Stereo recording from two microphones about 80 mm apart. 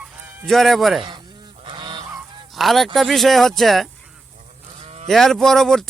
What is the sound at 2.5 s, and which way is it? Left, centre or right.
Speech, centre.